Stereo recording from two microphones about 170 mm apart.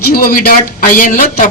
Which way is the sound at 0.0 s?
60° left (ahead or behind).